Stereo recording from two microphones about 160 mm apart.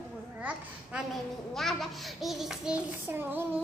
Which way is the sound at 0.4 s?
10° right (ahead or behind).